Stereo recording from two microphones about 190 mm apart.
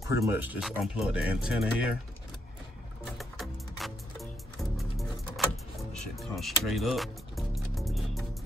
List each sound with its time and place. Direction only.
0.0 s speech: 15° right (ahead or behind)
3.2 s music: centre (ahead or behind)